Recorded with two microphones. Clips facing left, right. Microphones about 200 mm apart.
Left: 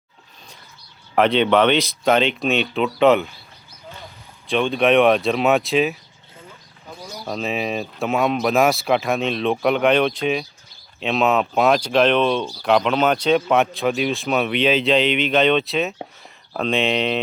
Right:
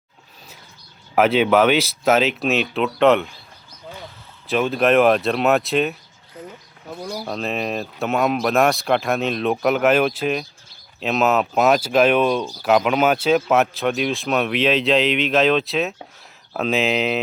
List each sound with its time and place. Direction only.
1.1 s speech: 5° right (ahead or behind)
4.4 s speech: 5° right (ahead or behind)
6.9 s speech: 55° right (ahead or behind)
7.3 s speech: centre (ahead or behind)